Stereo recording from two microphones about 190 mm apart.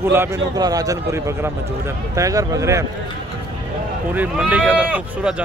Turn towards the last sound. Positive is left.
turn(degrees=-5)  # may be behind; listen again after turning